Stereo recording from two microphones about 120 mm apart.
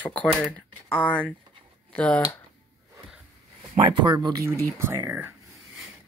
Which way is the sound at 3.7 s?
40° right (ahead or behind).